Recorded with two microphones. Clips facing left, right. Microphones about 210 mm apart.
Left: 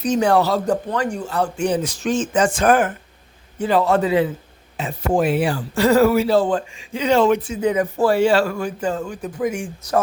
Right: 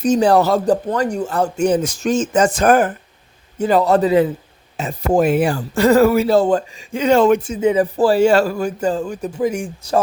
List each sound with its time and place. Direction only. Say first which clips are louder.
0.2 s speech: right 3 dB; 35° right (ahead or behind)
7.6 s speech: right 3 dB; 25° right (ahead or behind)